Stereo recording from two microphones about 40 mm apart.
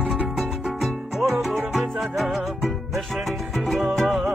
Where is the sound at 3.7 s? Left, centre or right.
Centre.